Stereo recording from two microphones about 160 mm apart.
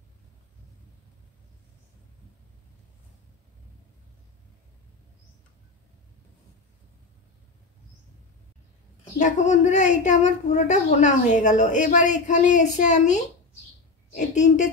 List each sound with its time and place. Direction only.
9.2 s speech: 50° left (ahead or behind)